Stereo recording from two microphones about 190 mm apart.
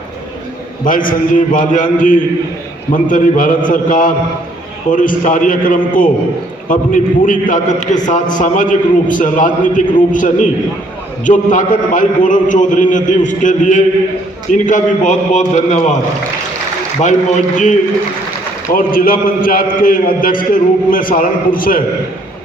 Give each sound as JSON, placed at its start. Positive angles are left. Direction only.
{"t": 0.9, "sound": "a man's voice", "side_deg": 45}
{"t": 17.0, "sound": "a man's voice", "side_deg": 40}